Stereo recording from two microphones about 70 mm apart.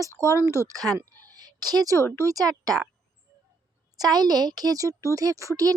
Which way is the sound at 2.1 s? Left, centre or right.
Right.